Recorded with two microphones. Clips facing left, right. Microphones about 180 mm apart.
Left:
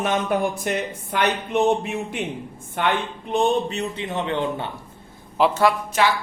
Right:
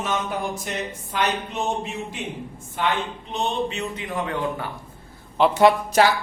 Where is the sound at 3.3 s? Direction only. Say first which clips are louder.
Left 5 dB; 40° left (ahead or behind).